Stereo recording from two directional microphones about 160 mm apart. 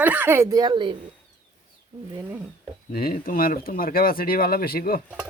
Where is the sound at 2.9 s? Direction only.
65° left (ahead or behind).